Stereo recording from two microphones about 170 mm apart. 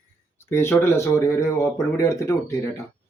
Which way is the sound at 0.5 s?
15° left (ahead or behind).